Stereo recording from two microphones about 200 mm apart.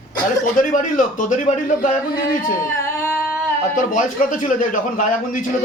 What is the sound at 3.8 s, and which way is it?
A man's voice, 40° left (ahead or behind).